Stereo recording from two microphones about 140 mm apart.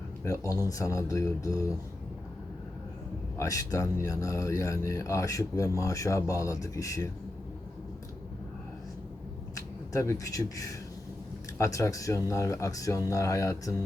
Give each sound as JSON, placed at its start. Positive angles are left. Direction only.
{"t": 0.3, "sound": "speech", "side_deg": 25}
{"t": 3.3, "sound": "speech", "side_deg": 25}
{"t": 9.6, "sound": "speech", "side_deg": 25}